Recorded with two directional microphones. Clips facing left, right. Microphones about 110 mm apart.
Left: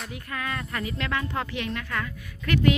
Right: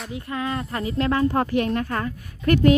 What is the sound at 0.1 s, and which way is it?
Speech, 25° right (ahead or behind).